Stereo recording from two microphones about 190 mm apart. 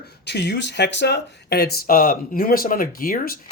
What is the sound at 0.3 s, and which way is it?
Speech, 60° left (ahead or behind).